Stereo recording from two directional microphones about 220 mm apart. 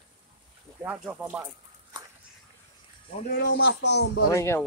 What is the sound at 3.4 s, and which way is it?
Speech, 55° left (ahead or behind).